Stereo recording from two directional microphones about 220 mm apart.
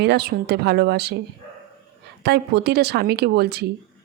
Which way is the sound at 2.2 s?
45° right (ahead or behind).